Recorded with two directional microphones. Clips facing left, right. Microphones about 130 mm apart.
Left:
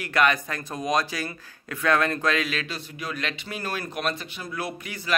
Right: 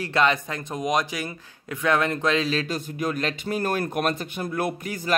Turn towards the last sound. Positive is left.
turn(degrees=-45)  # may be behind; listen again after turning